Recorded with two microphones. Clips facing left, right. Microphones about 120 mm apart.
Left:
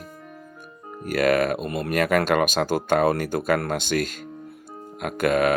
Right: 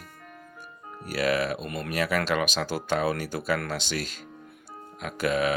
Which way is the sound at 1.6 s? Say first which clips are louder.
Left 6 dB; 35° left (ahead or behind).